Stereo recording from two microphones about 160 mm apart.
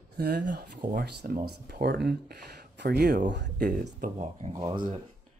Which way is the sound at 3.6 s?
50° right (ahead or behind).